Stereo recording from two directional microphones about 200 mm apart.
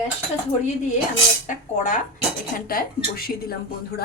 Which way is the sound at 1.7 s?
40° left (ahead or behind).